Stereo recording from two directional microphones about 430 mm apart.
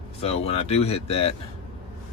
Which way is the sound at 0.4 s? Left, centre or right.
Centre.